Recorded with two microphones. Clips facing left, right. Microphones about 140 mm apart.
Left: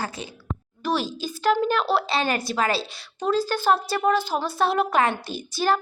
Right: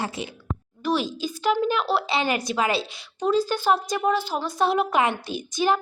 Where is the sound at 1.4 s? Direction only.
10° right (ahead or behind).